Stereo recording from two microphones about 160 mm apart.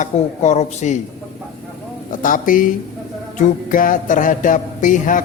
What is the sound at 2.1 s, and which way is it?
Speech, 55° left (ahead or behind).